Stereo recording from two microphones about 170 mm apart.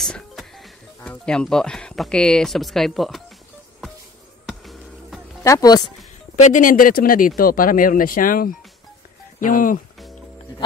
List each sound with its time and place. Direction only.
0.0 s speech: centre (ahead or behind)
4.5 s a sound: centre (ahead or behind)
5.4 s speech: 20° left (ahead or behind)
6.4 s speech: 50° left (ahead or behind)